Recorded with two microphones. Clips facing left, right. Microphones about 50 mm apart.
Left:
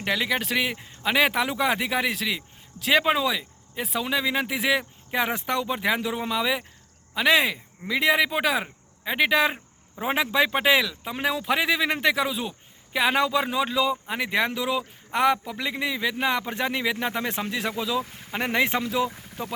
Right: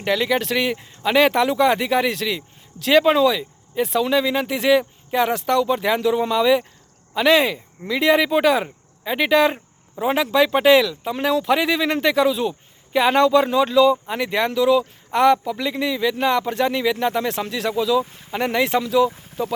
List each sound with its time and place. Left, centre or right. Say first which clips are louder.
0.0 s speech: right 5 dB; centre
10.0 s speech: right 5 dB; centre